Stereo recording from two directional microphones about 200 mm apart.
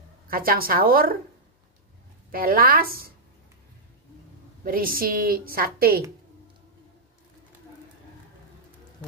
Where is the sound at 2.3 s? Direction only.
45° right (ahead or behind).